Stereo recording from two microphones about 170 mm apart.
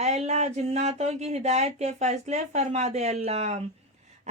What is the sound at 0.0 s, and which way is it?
Speech, 40° right (ahead or behind).